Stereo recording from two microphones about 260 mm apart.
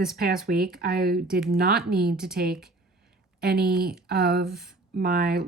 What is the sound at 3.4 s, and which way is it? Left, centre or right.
Speech, right.